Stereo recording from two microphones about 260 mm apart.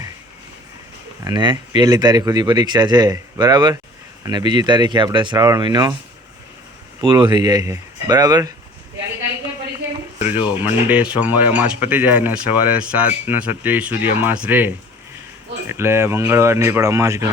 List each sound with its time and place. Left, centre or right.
1.2 s speech: centre
7.0 s speech: centre
10.3 s speech: centre
15.7 s speech: centre